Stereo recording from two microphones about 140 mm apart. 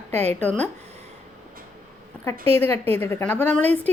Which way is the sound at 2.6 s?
15° left (ahead or behind).